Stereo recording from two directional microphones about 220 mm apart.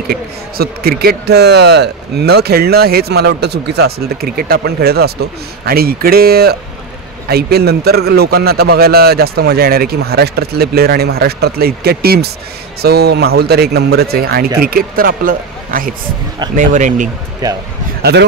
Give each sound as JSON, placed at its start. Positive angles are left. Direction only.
{"t": 0.1, "sound": "speech", "side_deg": -45}